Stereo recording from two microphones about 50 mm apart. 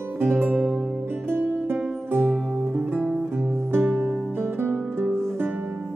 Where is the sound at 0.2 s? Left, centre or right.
Right.